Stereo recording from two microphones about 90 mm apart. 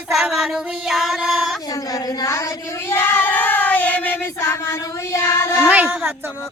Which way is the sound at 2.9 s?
25° left (ahead or behind).